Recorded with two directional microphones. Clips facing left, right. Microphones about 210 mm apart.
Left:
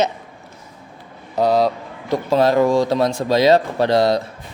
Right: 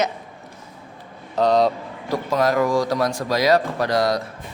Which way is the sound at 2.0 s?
25° left (ahead or behind).